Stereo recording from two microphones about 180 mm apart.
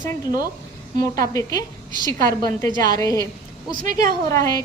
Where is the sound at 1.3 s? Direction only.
20° left (ahead or behind).